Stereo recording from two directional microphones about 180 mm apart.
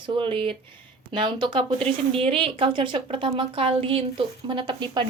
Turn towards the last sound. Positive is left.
turn(degrees=-25)  # may be behind; listen again after turning